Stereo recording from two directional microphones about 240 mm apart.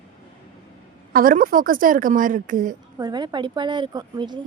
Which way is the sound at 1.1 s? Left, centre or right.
Right.